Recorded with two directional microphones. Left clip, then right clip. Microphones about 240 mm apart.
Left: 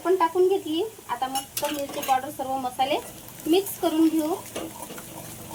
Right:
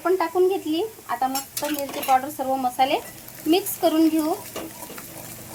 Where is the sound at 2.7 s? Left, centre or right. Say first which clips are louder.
Right 3 dB; right.